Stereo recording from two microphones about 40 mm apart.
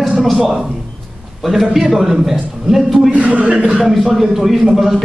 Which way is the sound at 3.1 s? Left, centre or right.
Right.